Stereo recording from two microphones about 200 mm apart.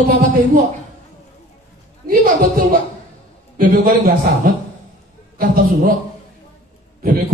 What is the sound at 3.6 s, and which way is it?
Music, 45° right (ahead or behind).